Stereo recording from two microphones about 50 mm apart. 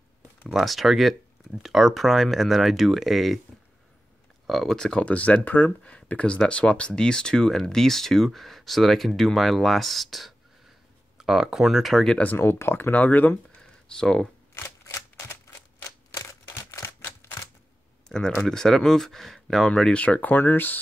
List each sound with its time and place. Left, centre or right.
0.5 s speech: centre
4.5 s speech: centre
5.0 s speech: left
5.4 s speech: left
5.9 s speech: left; by 10.3 s centre
11.1 s speech: centre
12.4 s speech: left
12.9 s speech: left
13.6 s a sound: centre
18.0 s a sound: centre
18.3 s speech: centre
19.9 s speech: left